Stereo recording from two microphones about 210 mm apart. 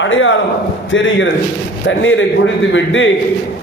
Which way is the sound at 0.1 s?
65° left (ahead or behind).